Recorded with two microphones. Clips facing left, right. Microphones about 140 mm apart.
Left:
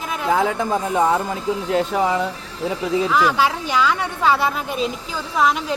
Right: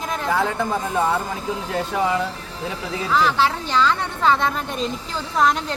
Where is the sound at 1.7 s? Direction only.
20° left (ahead or behind).